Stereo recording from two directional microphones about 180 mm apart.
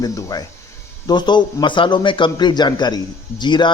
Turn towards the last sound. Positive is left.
turn(degrees=25)  # may be behind; listen again after turning